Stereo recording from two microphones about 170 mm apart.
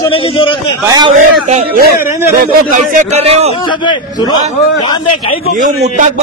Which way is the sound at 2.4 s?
55° right (ahead or behind).